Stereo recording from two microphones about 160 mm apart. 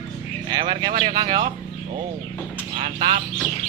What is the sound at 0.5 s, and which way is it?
Speech, 30° right (ahead or behind).